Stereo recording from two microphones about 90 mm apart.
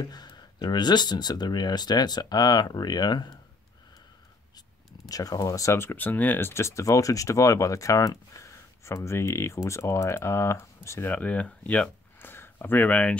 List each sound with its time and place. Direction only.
0.0 s speech: 50° left (ahead or behind)
5.0 s speech: 45° left (ahead or behind)
11.1 s speech: 15° left (ahead or behind)